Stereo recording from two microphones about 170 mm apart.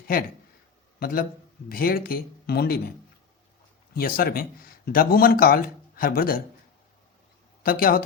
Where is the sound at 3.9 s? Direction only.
60° left (ahead or behind).